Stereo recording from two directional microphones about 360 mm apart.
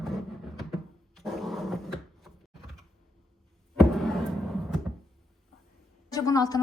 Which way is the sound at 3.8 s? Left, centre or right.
Centre.